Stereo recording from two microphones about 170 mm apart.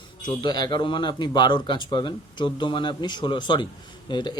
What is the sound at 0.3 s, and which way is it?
Speech, 25° left (ahead or behind).